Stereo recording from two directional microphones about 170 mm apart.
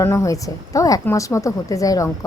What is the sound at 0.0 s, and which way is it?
A woman's voice, 15° left (ahead or behind).